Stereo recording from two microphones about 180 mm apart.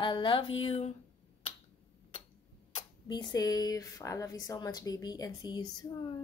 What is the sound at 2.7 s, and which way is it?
Speech, 25° left (ahead or behind).